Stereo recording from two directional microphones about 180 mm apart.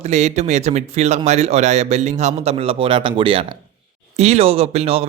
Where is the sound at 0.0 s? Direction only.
40° right (ahead or behind).